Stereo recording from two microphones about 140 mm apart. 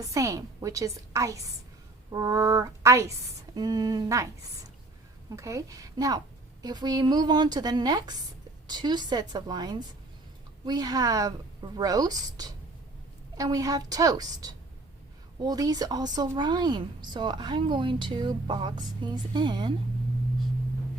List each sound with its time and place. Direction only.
0.0 s a woman's voice: 25° right (ahead or behind)